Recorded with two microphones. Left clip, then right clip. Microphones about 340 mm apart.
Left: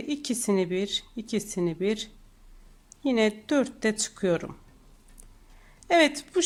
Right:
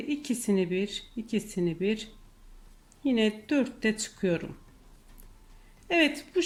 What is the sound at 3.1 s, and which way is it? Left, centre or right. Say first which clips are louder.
Speech: left 3 dB; centre.